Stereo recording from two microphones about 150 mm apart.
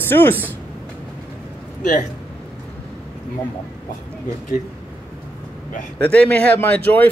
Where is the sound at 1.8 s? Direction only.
60° left (ahead or behind).